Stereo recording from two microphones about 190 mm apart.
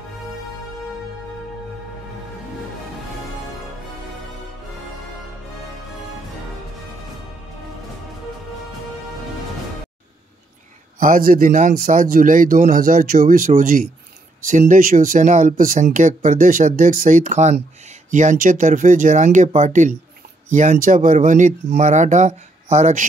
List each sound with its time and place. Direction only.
11.0 s speech: 45° right (ahead or behind)